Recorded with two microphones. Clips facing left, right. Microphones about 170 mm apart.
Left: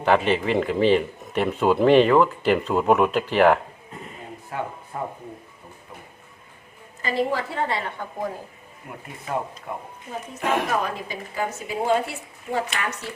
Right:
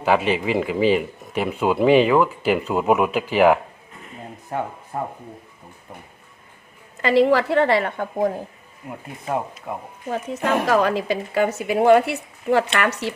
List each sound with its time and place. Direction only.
0.0 s speech: 5° right (ahead or behind)
7.0 s a woman's voice: 85° right; by 8.3 s 60° right (ahead or behind)
10.1 s a woman's voice: 90° right